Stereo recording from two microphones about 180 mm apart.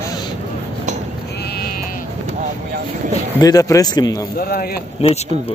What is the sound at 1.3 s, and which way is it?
Sheep, 65° left (ahead or behind).